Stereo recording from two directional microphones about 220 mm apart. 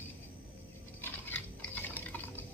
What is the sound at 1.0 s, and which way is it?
Water, 10° left (ahead or behind).